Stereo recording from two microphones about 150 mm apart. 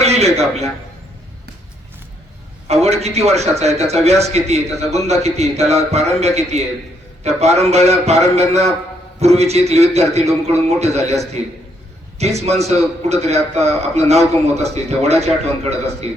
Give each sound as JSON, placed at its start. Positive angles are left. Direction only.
{"t": 0.0, "sound": "a man's voice", "side_deg": -45}
{"t": 2.6, "sound": "a man's voice", "side_deg": -45}
{"t": 12.2, "sound": "a man's voice", "side_deg": -45}